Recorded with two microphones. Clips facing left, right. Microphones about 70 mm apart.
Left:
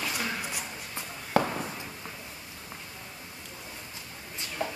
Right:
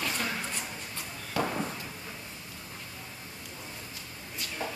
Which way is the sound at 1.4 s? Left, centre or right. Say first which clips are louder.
Left 5 dB; left.